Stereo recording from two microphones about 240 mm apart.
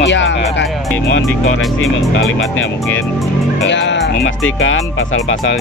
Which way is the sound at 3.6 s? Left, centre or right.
Left.